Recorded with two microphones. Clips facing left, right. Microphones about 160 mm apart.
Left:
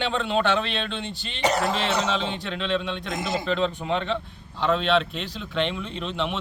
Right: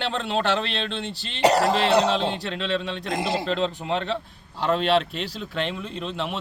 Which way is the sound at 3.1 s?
35° right (ahead or behind).